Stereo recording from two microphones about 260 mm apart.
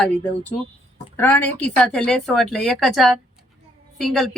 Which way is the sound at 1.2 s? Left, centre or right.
Centre.